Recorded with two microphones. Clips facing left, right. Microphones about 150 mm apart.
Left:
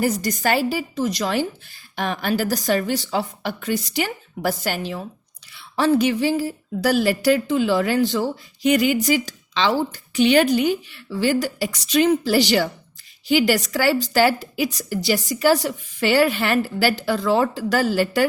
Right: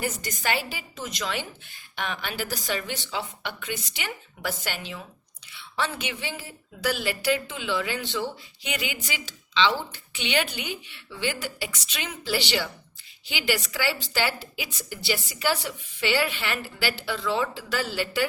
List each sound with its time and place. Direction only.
0.0 s a woman's voice: 40° left (ahead or behind)